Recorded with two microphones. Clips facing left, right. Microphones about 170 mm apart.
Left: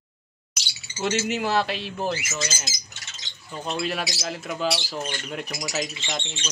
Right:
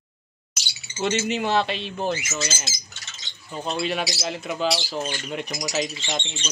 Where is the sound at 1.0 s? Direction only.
5° left (ahead or behind).